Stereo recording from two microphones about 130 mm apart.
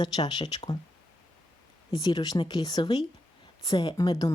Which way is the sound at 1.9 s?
30° left (ahead or behind).